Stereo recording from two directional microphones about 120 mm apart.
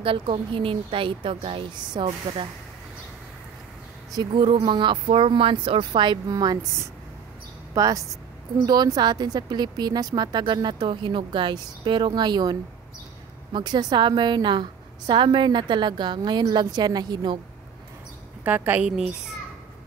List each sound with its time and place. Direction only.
0.0 s speech: 50° right (ahead or behind)
4.1 s speech: 40° right (ahead or behind)
7.7 s speech: 30° right (ahead or behind)
18.4 s a woman's voice: 15° right (ahead or behind)